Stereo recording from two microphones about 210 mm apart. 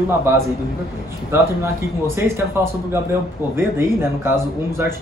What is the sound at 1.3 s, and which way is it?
Speech, 10° right (ahead or behind).